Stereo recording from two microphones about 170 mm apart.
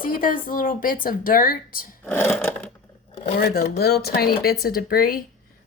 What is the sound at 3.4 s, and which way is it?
Speech, 65° left (ahead or behind).